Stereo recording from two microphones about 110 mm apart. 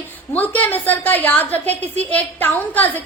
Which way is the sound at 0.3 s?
15° left (ahead or behind).